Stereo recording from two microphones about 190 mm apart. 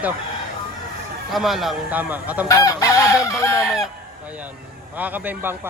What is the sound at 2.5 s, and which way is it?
Fowl, 15° left (ahead or behind).